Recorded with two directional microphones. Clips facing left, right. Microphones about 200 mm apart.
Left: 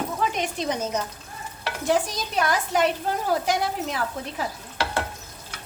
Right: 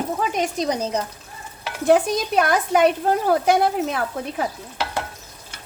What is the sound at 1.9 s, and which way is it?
A woman's voice, 55° right (ahead or behind).